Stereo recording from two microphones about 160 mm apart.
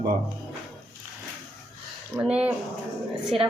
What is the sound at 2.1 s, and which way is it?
Speech, 10° right (ahead or behind).